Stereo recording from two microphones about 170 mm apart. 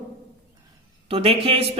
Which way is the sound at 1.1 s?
35° right (ahead or behind).